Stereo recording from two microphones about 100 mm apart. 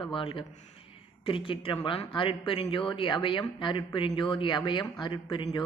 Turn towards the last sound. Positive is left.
turn(degrees=60)  # may be behind; listen again after turning